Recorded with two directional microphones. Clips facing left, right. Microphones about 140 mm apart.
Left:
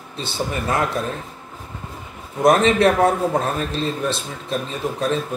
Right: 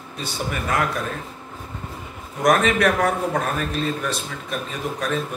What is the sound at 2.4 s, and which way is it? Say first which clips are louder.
A man's voice: left 3 dB; 30° left (ahead or behind).